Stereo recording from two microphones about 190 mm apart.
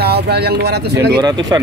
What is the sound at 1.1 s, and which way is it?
Speech, 20° right (ahead or behind).